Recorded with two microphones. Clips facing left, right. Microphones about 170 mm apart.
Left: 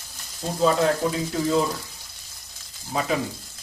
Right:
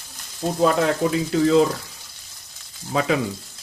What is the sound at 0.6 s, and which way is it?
Speech, 80° right.